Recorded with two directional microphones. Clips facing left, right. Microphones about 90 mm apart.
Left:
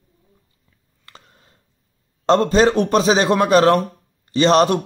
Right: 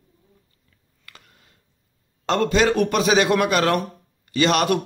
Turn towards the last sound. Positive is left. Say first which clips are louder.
# left 5 dB
turn(degrees=30)  # may be behind; listen again after turning